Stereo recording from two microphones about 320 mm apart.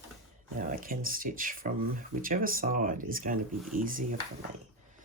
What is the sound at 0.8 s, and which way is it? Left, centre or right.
Speech, right.